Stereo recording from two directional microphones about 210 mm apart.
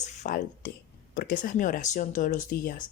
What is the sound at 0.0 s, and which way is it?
Speech, 35° left (ahead or behind).